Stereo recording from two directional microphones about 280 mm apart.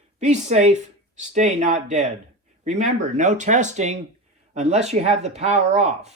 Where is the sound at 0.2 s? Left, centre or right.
Right.